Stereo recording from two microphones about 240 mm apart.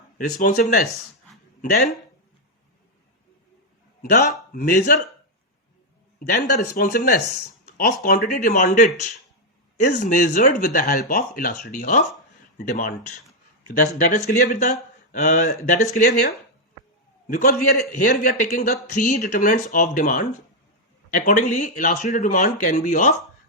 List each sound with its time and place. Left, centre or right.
0.3 s speech: left
1.7 s speech: left
4.0 s speech: left
6.1 s speech: left
14.1 s speech: left